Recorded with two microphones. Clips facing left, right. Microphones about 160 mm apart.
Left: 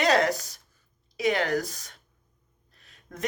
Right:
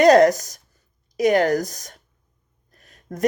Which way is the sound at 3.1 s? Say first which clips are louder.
Right 9 dB; 40° right (ahead or behind).